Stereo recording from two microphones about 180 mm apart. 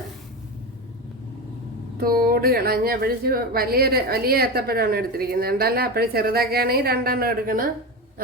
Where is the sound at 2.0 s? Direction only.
55° right (ahead or behind).